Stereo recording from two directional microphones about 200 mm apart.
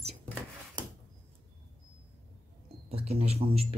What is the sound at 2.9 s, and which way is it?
Speech, 30° right (ahead or behind).